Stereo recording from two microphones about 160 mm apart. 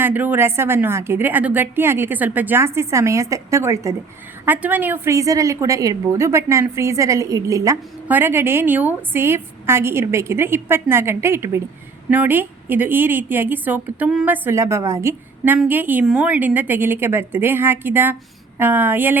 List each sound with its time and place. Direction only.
0.0 s a woman's voice: 10° right (ahead or behind)